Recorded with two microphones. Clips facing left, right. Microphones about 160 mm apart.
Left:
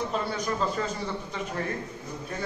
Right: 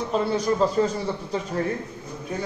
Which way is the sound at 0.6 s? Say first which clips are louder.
Right 6 dB; 35° right (ahead or behind).